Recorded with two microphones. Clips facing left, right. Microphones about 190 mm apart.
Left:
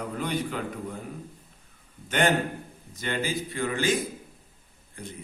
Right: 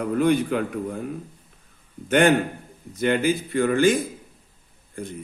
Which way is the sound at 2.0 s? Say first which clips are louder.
Right 6 dB; 55° right (ahead or behind).